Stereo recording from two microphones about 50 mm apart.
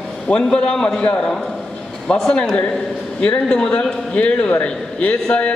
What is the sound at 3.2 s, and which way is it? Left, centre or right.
A man's voice, left.